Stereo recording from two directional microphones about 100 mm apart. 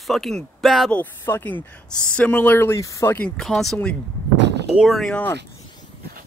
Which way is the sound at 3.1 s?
10° left (ahead or behind).